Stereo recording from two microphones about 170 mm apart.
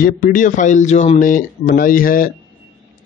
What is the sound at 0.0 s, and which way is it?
Speech, 50° left (ahead or behind).